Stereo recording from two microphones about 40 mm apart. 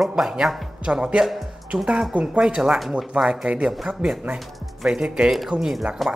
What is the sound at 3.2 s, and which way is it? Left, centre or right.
Speech, right.